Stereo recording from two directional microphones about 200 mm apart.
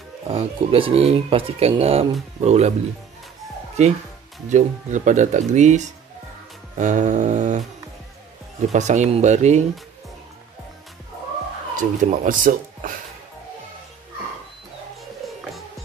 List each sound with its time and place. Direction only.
0.3 s speech: 30° right (ahead or behind)
3.8 s speech: 35° right (ahead or behind)
8.7 s speech: 35° right (ahead or behind)
11.7 s speech: 40° right (ahead or behind)